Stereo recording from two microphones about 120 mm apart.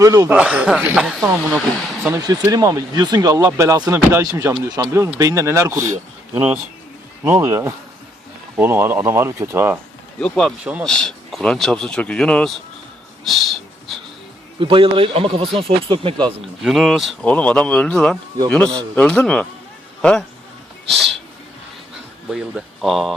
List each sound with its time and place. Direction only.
0.0 s speech: 30° right (ahead or behind)
0.3 s speech: 10° right (ahead or behind)
2.1 s speech: 30° right (ahead or behind)
10.2 s speech: 5° left (ahead or behind)
13.2 s a sound: centre (ahead or behind)
14.6 s speech: 45° right (ahead or behind)
16.6 s a man's voice: centre (ahead or behind)
22.3 s speech: 5° right (ahead or behind)